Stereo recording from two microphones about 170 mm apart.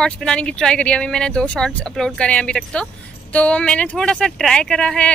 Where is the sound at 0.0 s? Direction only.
5° left (ahead or behind).